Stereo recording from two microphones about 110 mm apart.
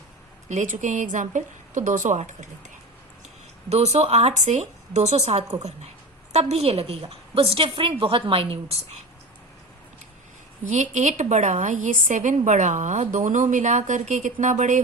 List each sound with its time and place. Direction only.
0.4 s a woman's voice: 90° right
3.7 s a woman's voice: 75° right (ahead or behind)
5.5 s a woman's voice: 90° right; by 9.0 s 65° right (ahead or behind)
10.7 s a woman's voice: 90° right